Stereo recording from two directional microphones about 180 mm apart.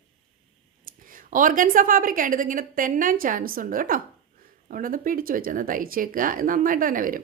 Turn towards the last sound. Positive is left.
turn(degrees=-50)  # may be behind; listen again after turning